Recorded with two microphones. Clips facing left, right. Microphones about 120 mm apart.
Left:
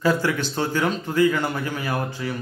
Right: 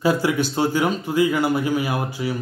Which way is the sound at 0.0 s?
15° right (ahead or behind).